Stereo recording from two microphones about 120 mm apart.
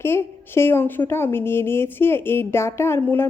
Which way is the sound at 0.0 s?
20° left (ahead or behind).